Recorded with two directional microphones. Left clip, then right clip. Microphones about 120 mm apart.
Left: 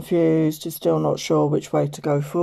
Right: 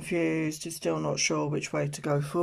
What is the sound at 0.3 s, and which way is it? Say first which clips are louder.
Speech: left 10 dB; 35° left (ahead or behind).